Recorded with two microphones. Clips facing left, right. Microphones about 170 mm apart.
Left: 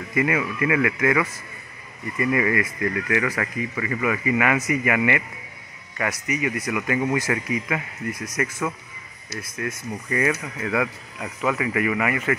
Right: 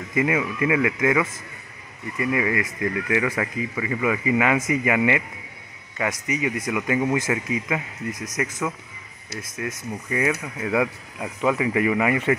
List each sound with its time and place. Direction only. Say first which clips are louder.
0.1 s speech: even; 20° right (ahead or behind)
6.2 s speech: even; 25° right (ahead or behind)
9.6 s speech: even; 15° right (ahead or behind)